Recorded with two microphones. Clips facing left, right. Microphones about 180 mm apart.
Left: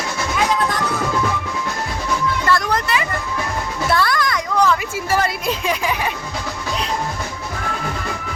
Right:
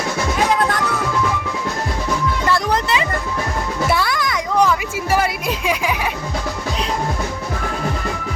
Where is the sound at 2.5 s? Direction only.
20° right (ahead or behind).